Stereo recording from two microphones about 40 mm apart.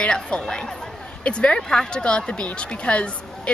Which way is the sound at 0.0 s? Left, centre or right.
Left.